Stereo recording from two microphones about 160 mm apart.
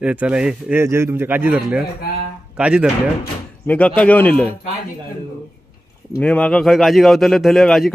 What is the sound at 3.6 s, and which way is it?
Speech, 10° left (ahead or behind).